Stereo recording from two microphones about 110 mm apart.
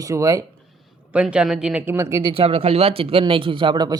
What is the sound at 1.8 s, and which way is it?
Speech, 20° right (ahead or behind).